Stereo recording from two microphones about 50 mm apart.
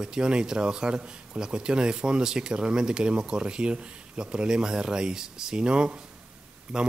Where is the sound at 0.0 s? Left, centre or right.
Centre.